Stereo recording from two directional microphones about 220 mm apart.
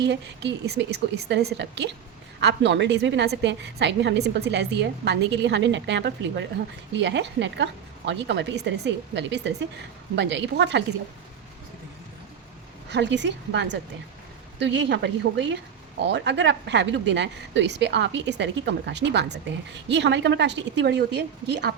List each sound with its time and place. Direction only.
0.0 s speech: 50° right (ahead or behind)
12.9 s speech: 55° right (ahead or behind)